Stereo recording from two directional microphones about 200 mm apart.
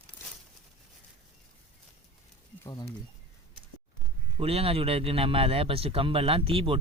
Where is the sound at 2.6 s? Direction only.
20° left (ahead or behind).